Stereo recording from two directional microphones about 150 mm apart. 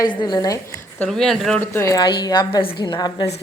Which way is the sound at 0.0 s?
30° left (ahead or behind).